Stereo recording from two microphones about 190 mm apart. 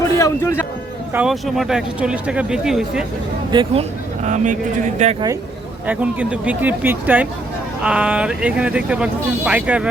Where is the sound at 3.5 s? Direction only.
30° right (ahead or behind).